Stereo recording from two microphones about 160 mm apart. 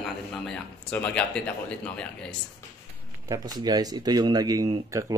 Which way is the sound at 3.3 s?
25° right (ahead or behind).